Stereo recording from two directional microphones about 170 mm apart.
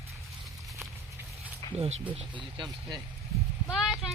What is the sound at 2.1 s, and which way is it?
Speech, 30° right (ahead or behind).